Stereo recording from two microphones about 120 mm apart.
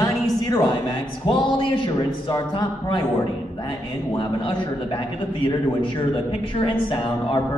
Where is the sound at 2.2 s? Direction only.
40° left (ahead or behind).